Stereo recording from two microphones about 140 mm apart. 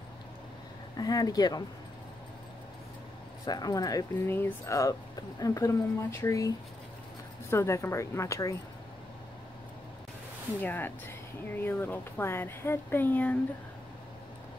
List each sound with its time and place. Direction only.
0.9 s speech: 25° left (ahead or behind)
3.4 s speech: 25° left (ahead or behind)
10.6 s speech: 15° left (ahead or behind)